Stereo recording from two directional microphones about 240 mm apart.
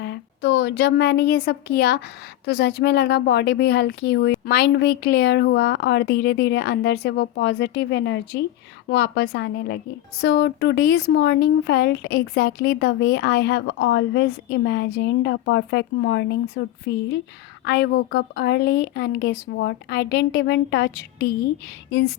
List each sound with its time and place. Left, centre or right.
0.0 s a woman's voice: left